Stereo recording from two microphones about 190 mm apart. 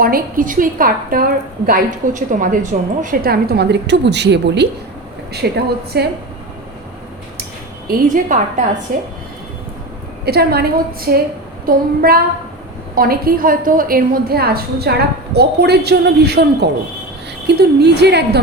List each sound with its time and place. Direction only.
0.0 s a woman's voice: 45° right (ahead or behind)
7.9 s a woman's voice: 45° right (ahead or behind)
10.2 s a woman's voice: 55° right (ahead or behind)